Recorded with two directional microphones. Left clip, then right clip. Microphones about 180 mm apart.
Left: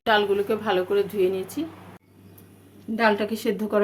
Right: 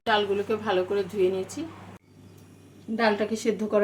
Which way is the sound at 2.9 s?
25° left (ahead or behind).